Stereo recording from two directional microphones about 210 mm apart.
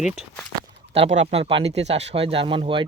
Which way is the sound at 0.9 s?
30° right (ahead or behind).